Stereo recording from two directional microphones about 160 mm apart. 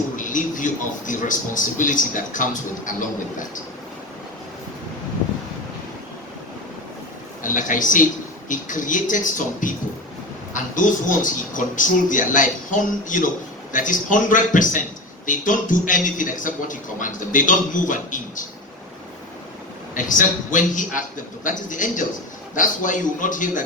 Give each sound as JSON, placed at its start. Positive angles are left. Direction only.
{"t": 0.2, "sound": "speech", "side_deg": 55}
{"t": 7.4, "sound": "speech", "side_deg": 55}
{"t": 19.9, "sound": "speech", "side_deg": 55}